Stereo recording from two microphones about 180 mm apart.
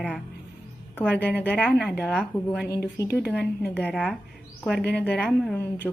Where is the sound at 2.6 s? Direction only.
60° left (ahead or behind).